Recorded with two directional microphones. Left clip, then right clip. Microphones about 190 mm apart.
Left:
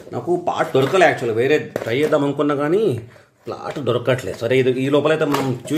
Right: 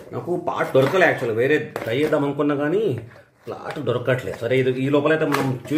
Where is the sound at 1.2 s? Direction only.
35° left (ahead or behind).